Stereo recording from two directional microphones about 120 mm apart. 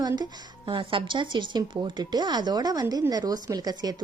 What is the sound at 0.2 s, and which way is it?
Speech, 40° right (ahead or behind).